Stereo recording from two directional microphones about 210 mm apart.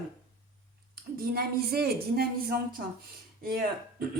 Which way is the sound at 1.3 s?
45° right (ahead or behind).